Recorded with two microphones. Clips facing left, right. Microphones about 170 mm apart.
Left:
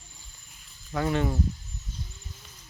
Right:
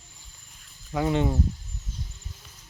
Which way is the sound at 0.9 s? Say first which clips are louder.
Right 2 dB; 15° right (ahead or behind).